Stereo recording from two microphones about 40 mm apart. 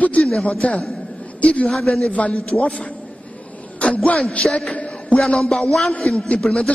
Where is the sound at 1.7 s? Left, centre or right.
Centre.